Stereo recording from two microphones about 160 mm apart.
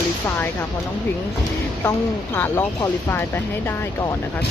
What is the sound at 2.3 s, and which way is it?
Speech, 10° left (ahead or behind).